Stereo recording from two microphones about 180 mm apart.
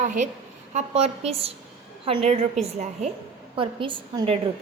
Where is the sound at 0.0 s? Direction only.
45° right (ahead or behind).